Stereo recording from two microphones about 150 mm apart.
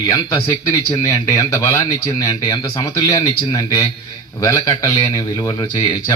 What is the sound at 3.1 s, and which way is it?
A man's voice, 20° left (ahead or behind).